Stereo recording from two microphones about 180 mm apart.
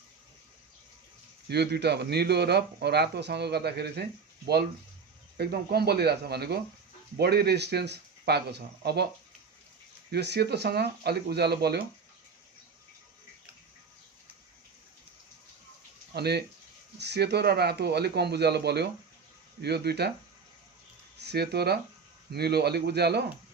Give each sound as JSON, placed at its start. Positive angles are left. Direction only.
{"t": 1.5, "sound": "speech", "side_deg": -65}
{"t": 5.4, "sound": "speech", "side_deg": -60}
{"t": 10.1, "sound": "speech", "side_deg": -65}
{"t": 16.1, "sound": "speech", "side_deg": -65}
{"t": 21.2, "sound": "speech", "side_deg": -65}